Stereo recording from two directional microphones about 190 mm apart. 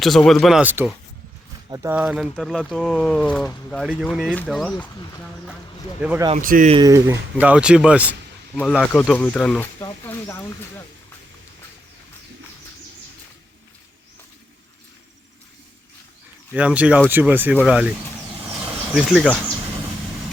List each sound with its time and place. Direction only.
0.0 s speech: centre (ahead or behind); by 2.0 s 15° right (ahead or behind)
2.0 s speech: 5° right (ahead or behind)
6.0 s speech: 10° right (ahead or behind)
6.3 s speech: 45° right (ahead or behind)
6.7 s speech: 20° right (ahead or behind); by 8.1 s 5° right (ahead or behind)
8.9 s speech: 10° left (ahead or behind)
16.5 s speech: 5° right (ahead or behind)
18.4 s a sound: 30° right (ahead or behind)
18.9 s speech: centre (ahead or behind)